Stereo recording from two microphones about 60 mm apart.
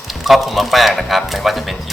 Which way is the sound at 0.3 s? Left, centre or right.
Centre.